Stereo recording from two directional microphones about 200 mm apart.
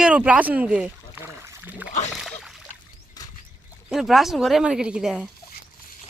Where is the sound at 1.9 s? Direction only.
35° left (ahead or behind).